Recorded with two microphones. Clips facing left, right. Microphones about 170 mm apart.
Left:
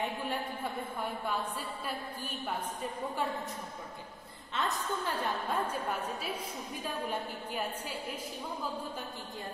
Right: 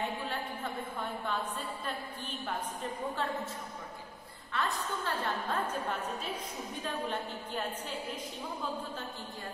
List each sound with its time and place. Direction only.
2.4 s a woman's voice: 10° left (ahead or behind)
4.6 s a woman's voice: 20° left (ahead or behind)
5.5 s a woman's voice: 10° left (ahead or behind)